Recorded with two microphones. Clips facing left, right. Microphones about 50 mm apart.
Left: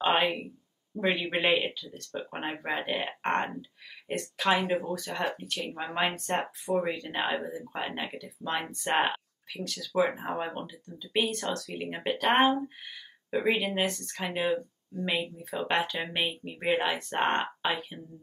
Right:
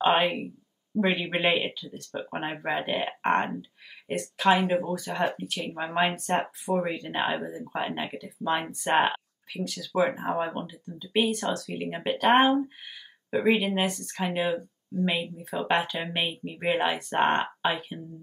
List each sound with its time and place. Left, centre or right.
0.0 s speech: centre